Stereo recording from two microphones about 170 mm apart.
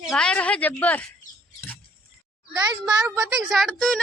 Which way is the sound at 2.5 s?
25° right (ahead or behind).